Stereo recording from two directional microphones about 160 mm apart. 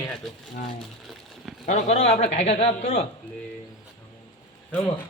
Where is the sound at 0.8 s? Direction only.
Centre (ahead or behind).